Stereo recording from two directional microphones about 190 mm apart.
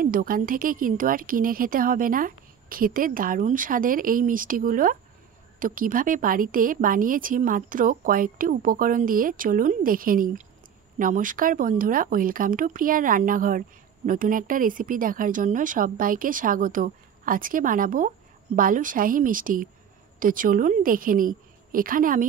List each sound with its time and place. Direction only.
0.0 s a woman's voice: 50° right (ahead or behind)